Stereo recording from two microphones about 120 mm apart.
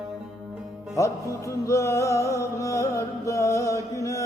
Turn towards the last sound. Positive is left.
turn(degrees=25)  # may be behind; listen again after turning